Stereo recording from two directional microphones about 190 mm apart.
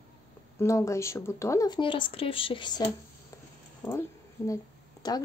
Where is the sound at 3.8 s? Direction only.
15° left (ahead or behind).